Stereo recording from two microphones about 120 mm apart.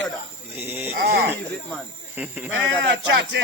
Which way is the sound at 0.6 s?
20° right (ahead or behind).